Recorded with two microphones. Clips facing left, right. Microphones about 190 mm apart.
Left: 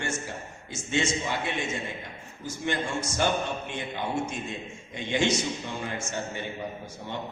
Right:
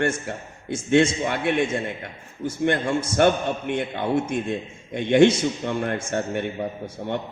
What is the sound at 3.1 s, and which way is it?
A man's voice, 60° right (ahead or behind).